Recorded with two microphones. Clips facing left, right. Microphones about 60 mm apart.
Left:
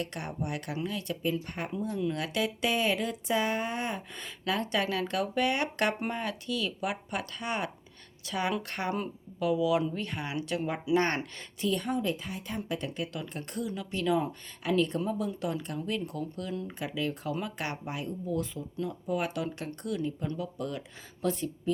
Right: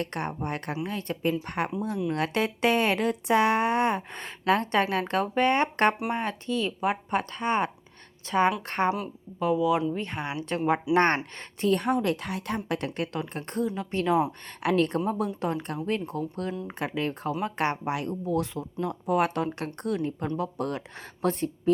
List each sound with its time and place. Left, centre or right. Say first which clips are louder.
0.0 s speech: right 4 dB; right
10.9 s speech: right 2 dB; right
14.6 s speech: right 4 dB; right
17.8 s speech: right 6 dB; right